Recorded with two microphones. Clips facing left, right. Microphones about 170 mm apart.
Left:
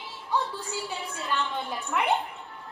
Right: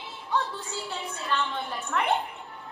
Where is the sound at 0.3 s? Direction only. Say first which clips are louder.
Even; 10° left (ahead or behind).